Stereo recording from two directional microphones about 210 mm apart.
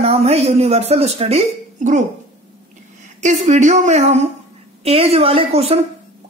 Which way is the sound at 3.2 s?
35° right (ahead or behind).